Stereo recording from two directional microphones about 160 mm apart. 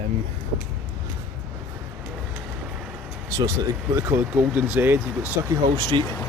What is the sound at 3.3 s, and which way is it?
Vehicle, 20° right (ahead or behind).